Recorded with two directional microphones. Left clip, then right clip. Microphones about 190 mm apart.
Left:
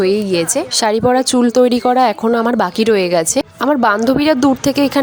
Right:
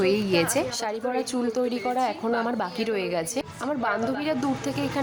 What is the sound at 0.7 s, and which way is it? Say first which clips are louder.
Speech: left 15 dB; 45° left (ahead or behind).